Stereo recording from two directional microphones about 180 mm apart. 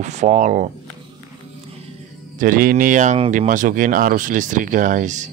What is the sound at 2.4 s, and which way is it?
Speech, 50° right (ahead or behind).